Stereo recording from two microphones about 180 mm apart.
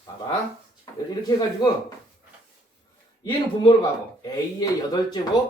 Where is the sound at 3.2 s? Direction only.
25° left (ahead or behind).